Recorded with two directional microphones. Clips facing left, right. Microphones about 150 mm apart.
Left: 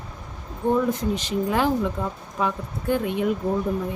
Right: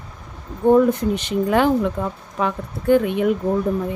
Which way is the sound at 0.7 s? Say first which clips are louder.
Right 6 dB; 60° right (ahead or behind).